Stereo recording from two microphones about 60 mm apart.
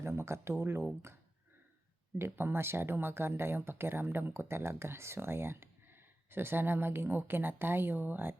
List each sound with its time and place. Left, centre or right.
0.0 s speech: right
2.1 s speech: right